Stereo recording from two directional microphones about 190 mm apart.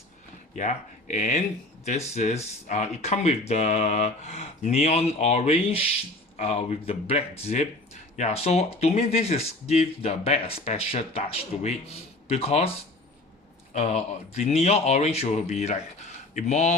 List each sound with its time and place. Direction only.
0.5 s speech: 40° left (ahead or behind)
13.7 s speech: 35° left (ahead or behind)